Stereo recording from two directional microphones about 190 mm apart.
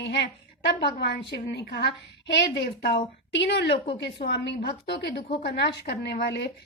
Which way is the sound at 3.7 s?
30° left (ahead or behind).